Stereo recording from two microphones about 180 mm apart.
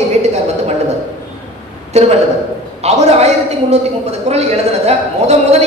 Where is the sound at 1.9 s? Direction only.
35° right (ahead or behind).